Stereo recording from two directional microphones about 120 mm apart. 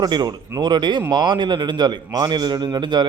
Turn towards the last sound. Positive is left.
turn(degrees=-40)  # may be behind; listen again after turning